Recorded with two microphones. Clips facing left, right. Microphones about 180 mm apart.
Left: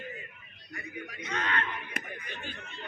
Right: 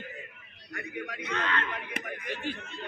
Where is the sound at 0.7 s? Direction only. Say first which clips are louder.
Right 4 dB; 90° right.